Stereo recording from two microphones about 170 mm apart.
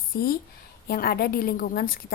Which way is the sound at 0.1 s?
65° left (ahead or behind).